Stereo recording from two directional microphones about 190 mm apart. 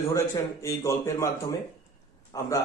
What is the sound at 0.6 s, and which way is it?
Speech, 15° left (ahead or behind).